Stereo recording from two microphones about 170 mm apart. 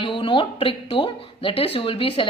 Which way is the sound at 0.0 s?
30° left (ahead or behind).